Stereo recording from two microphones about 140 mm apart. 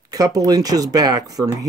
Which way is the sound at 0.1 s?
25° right (ahead or behind).